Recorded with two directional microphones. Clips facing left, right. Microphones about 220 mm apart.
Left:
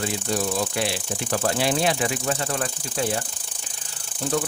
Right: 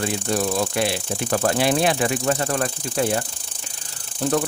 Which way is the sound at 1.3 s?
55° right (ahead or behind).